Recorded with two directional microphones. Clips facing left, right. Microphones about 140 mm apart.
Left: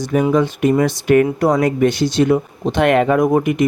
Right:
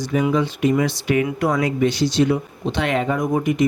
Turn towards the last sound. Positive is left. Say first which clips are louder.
# left 6 dB
turn(degrees=60)  # may be behind; listen again after turning